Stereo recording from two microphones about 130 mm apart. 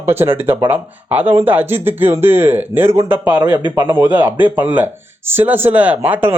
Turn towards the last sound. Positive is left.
turn(degrees=-15)  # may be behind; listen again after turning